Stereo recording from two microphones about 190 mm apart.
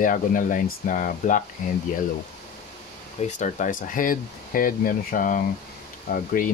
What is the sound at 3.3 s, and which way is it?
Speech, 40° left (ahead or behind).